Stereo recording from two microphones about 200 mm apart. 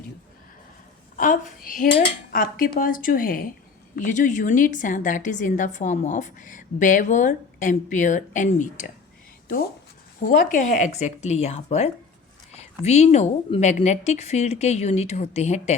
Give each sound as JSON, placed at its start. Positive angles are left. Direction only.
{"t": 1.1, "sound": "a woman's voice", "side_deg": 40}
{"t": 10.2, "sound": "a woman's voice", "side_deg": 45}